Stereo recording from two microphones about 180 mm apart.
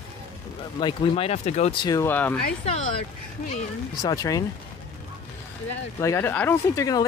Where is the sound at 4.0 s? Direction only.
20° left (ahead or behind).